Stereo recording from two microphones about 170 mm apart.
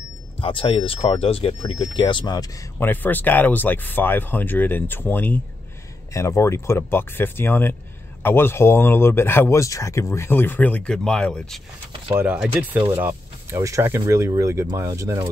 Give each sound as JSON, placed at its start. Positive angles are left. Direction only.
{"t": 0.4, "sound": "speech", "side_deg": 30}
{"t": 2.9, "sound": "speech", "side_deg": 10}
{"t": 12.2, "sound": "speech", "side_deg": -10}